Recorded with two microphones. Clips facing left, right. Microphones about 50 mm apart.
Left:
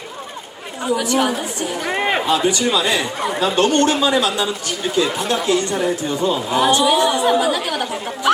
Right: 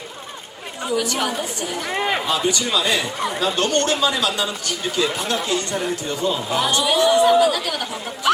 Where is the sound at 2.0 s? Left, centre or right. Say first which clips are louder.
Left 3 dB; left.